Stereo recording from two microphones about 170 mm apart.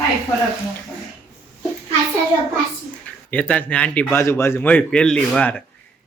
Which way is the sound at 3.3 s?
10° left (ahead or behind).